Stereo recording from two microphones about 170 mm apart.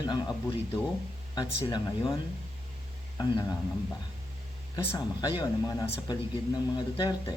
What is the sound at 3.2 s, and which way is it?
Speech, 25° left (ahead or behind).